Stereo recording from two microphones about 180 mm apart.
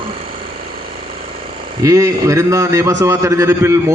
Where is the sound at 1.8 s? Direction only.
15° right (ahead or behind).